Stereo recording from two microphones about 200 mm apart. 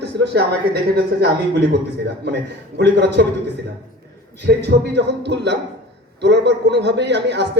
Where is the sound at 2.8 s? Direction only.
55° right (ahead or behind).